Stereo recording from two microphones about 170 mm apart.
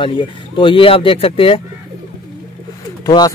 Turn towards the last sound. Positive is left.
turn(degrees=20)  # may be behind; listen again after turning